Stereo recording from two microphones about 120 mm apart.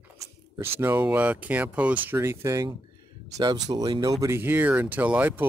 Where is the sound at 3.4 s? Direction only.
35° right (ahead or behind).